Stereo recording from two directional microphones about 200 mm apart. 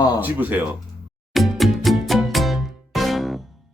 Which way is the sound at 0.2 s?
10° right (ahead or behind).